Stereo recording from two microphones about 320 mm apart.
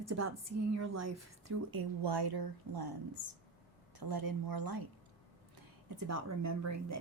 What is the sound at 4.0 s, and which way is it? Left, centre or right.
Speech, right.